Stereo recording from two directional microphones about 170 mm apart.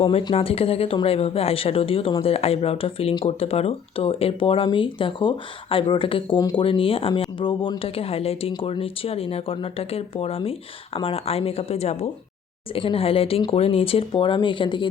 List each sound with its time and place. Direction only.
0.0 s speech: 35° left (ahead or behind)